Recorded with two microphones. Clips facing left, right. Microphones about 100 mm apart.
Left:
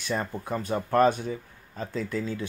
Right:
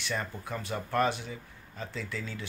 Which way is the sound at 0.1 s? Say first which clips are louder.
Left 6 dB; 30° left (ahead or behind).